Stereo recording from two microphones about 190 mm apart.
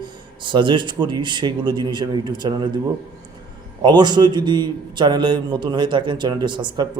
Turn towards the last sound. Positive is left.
turn(degrees=-25)  # may be behind; listen again after turning